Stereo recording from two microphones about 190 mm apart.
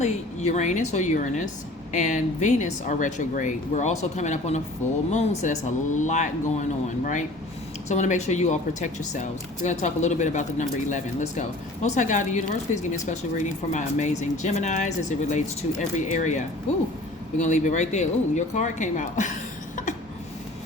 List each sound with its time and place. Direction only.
0.0 s speech: 35° left (ahead or behind)